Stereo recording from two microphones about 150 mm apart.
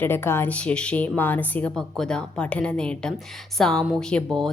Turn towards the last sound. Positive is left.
turn(degrees=5)  # may be behind; listen again after turning